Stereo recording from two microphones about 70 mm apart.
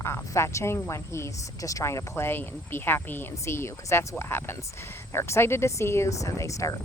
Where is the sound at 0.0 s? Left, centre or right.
Left.